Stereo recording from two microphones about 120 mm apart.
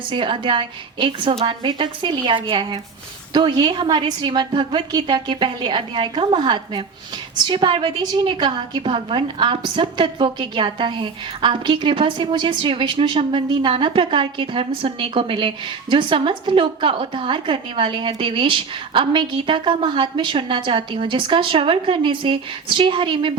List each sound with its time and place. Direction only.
0.1 s a woman's voice: 45° right (ahead or behind)